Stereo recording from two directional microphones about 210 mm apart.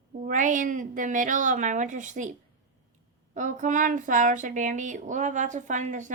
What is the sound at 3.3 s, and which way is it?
Speech, 40° right (ahead or behind).